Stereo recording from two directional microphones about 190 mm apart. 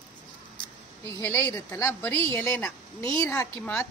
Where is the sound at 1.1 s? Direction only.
15° left (ahead or behind).